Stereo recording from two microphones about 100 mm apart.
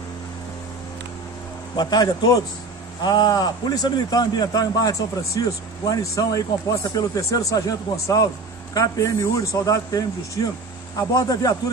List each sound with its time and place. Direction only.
1.8 s a man's voice: 45° left (ahead or behind)